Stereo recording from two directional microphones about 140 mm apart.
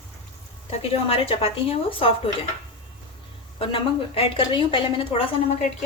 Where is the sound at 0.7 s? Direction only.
45° left (ahead or behind).